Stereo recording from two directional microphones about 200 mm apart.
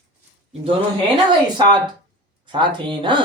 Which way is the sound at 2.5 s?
25° right (ahead or behind).